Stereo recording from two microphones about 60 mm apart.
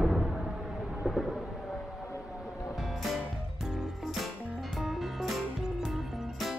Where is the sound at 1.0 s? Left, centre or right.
Centre.